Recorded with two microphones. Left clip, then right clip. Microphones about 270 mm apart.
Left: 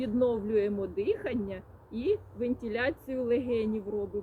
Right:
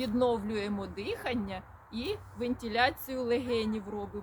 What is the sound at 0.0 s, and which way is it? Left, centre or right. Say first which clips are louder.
Speech: left 1 dB; centre.